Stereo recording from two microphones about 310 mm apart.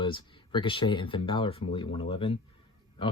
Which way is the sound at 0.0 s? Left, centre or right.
Centre.